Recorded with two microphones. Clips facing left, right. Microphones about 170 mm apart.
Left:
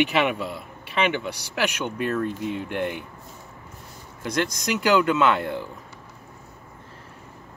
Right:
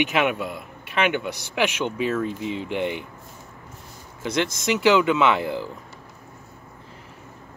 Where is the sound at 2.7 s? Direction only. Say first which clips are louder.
Right 2 dB; centre (ahead or behind).